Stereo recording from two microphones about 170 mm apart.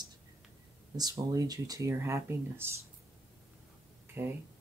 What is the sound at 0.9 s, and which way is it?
Speech, 20° right (ahead or behind).